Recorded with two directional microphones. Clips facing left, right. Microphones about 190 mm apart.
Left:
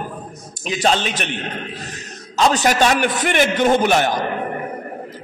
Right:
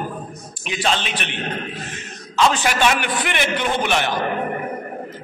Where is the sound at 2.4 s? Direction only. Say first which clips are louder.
Left 2 dB; 40° left (ahead or behind).